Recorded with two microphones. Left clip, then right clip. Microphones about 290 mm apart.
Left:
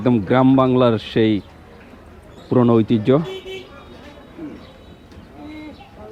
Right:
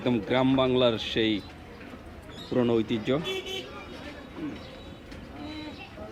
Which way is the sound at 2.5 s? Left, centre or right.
Left.